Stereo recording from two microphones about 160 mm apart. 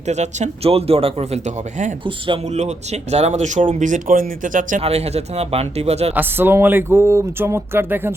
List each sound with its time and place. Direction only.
0.1 s speech: 45° right (ahead or behind)
2.0 s speech: 30° right (ahead or behind)
2.6 s speech: 45° right (ahead or behind)
4.8 s speech: 40° right (ahead or behind)
6.1 s speech: 15° right (ahead or behind)